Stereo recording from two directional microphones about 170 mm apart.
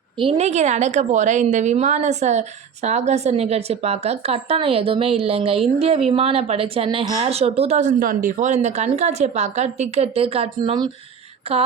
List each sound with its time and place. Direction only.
0.2 s a woman's voice: 35° right (ahead or behind)